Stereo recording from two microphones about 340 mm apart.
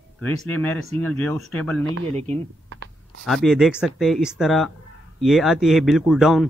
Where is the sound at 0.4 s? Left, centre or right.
Centre.